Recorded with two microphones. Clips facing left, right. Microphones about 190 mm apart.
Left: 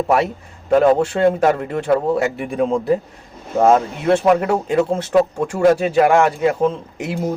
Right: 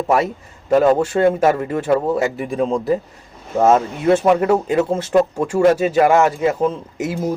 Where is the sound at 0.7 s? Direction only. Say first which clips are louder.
Even; 5° right (ahead or behind).